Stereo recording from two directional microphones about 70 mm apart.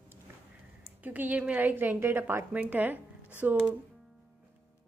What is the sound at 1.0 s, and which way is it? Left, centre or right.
A woman's voice, right.